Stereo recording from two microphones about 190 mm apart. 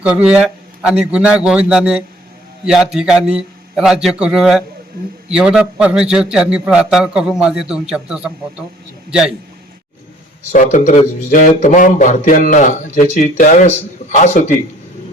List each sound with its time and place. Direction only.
0.0 s a man's voice: 5° right (ahead or behind)
10.5 s speech: 40° left (ahead or behind)